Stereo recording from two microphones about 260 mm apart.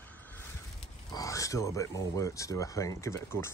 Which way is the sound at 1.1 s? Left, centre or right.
Centre.